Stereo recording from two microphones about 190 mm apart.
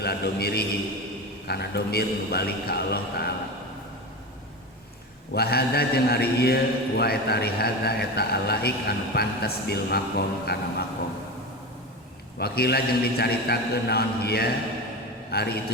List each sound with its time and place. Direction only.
0.0 s a man's voice: 55° left (ahead or behind)
5.3 s a man's voice: 55° left (ahead or behind)
12.4 s a man's voice: 55° left (ahead or behind)